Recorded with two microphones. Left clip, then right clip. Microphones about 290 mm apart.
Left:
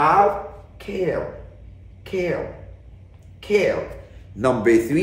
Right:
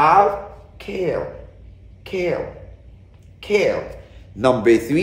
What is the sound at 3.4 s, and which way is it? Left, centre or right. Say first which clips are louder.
A woman's voice: right 1 dB; centre.